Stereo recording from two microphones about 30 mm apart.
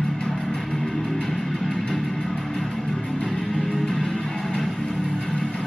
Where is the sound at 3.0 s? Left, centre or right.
Left.